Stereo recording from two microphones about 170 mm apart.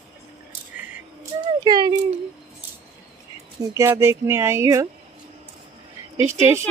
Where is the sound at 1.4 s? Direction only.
25° right (ahead or behind).